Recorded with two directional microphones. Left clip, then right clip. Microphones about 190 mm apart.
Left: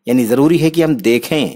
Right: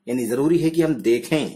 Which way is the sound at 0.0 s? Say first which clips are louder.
Left 9 dB; 45° left (ahead or behind).